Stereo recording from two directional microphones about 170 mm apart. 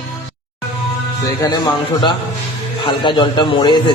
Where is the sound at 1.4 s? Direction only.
25° left (ahead or behind).